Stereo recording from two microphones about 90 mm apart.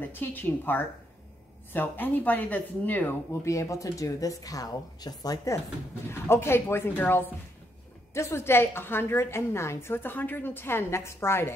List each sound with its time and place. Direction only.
0.0 s a woman's voice: 20° left (ahead or behind)
3.4 s speech: 35° left (ahead or behind)
6.0 s a woman's voice: 30° left (ahead or behind)